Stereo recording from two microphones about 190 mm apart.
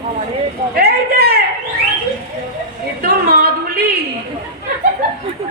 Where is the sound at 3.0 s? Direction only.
50° right (ahead or behind).